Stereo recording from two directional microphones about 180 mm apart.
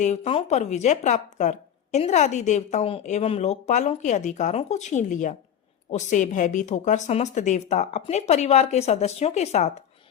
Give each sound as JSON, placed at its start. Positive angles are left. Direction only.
{"t": 0.0, "sound": "speech", "side_deg": 35}